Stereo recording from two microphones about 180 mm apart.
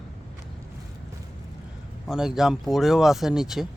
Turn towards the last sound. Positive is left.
turn(degrees=0)  # may be behind; listen again after turning